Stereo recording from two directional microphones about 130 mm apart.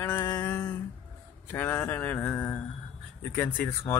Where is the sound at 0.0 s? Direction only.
20° left (ahead or behind).